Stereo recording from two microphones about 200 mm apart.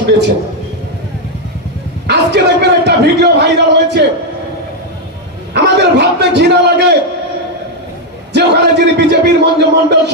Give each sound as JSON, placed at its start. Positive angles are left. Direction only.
{"t": 2.0, "sound": "a man's voice", "side_deg": -55}
{"t": 5.5, "sound": "a man's voice", "side_deg": -55}
{"t": 8.3, "sound": "a man's voice", "side_deg": -60}